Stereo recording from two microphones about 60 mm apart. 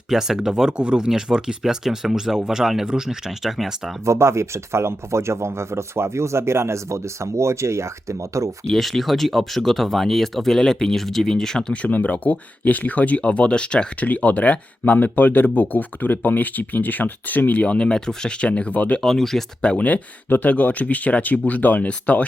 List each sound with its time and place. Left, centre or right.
0.1 s speech: centre
4.0 s speech: right
8.6 s speech: centre
11.7 s speech: left
19.0 s speech: centre
19.6 s speech: left